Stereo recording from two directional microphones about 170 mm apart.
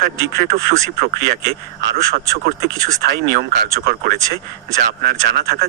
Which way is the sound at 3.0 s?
55° right (ahead or behind).